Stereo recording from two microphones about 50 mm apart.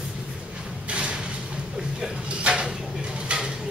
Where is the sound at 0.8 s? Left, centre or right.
Right.